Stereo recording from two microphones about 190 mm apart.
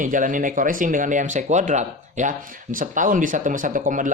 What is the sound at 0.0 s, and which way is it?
Speech, 45° right (ahead or behind).